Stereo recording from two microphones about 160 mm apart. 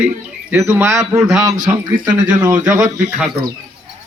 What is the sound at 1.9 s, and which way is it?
Speech, 60° right (ahead or behind).